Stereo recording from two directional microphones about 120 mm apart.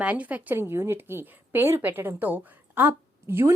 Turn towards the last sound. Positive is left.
turn(degrees=-20)  # may be behind; listen again after turning